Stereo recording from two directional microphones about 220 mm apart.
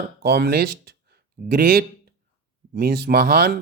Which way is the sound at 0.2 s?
45° right (ahead or behind).